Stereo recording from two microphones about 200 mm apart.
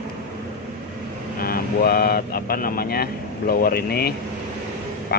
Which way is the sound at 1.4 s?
50° left (ahead or behind).